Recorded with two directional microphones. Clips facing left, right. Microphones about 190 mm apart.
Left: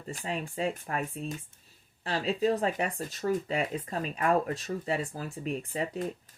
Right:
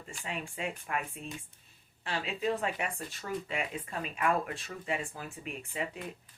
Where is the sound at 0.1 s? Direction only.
40° left (ahead or behind).